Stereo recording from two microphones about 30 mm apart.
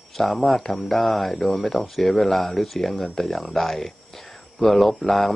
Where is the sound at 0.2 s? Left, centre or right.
Centre.